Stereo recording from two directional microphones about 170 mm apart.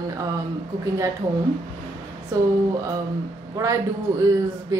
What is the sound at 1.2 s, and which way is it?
Speech, 20° right (ahead or behind).